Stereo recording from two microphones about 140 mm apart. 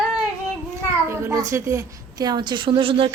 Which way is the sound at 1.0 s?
20° right (ahead or behind).